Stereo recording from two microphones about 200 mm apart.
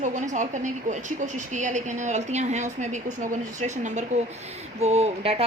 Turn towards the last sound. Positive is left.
turn(degrees=-30)  # may be behind; listen again after turning